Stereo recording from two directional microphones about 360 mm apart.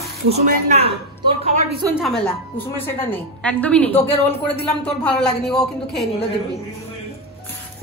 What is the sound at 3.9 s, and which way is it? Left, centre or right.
Speech, centre.